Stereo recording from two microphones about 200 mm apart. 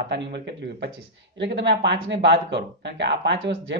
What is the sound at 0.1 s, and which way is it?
Speech, 60° right (ahead or behind).